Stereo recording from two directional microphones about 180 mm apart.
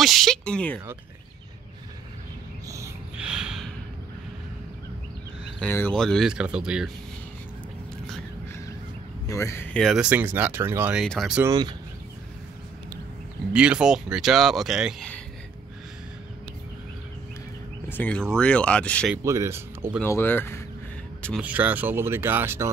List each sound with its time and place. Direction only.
0.0 s speech: centre (ahead or behind)
3.2 s snort: 5° right (ahead or behind)
5.6 s speech: 10° left (ahead or behind)
9.3 s speech: 15° left (ahead or behind)
10.0 s speech: 10° right (ahead or behind)
11.0 s speech: centre (ahead or behind)
11.4 s speech: 20° right (ahead or behind)
13.5 s speech: 5° right (ahead or behind)
17.8 s speech: 10° left (ahead or behind)
19.2 s speech: 15° right (ahead or behind)
20.0 s speech: 10° left (ahead or behind)
21.4 s speech: 10° right (ahead or behind)